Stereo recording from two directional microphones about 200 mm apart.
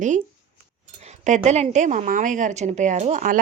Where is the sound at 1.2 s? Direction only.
35° right (ahead or behind).